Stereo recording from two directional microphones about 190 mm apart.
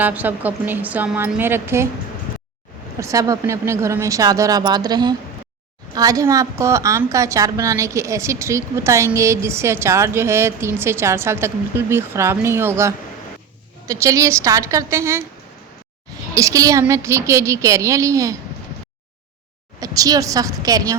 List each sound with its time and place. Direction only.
0.0 s a woman's voice: 10° right (ahead or behind)
3.0 s a woman's voice: 15° right (ahead or behind)
16.3 s a woman's voice: 15° right (ahead or behind)
19.8 s a woman's voice: 20° right (ahead or behind)